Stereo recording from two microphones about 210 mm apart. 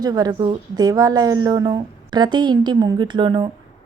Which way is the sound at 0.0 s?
20° right (ahead or behind).